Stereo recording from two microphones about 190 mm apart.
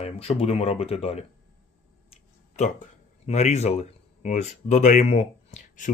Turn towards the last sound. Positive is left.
turn(degrees=35)  # may be behind; listen again after turning